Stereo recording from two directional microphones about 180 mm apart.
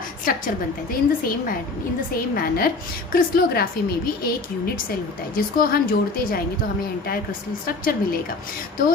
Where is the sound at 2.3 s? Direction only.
55° left (ahead or behind).